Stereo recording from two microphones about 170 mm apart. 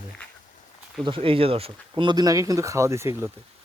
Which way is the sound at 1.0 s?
30° right (ahead or behind).